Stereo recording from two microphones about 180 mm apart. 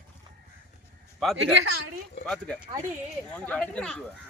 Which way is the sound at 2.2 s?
5° left (ahead or behind).